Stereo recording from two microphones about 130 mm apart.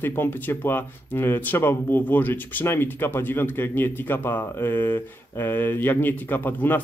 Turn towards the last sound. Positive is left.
turn(degrees=15)  # may be behind; listen again after turning